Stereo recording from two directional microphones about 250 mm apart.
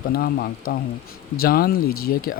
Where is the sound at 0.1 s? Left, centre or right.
Left.